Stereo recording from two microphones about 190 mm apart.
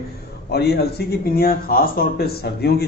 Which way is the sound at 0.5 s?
60° left (ahead or behind).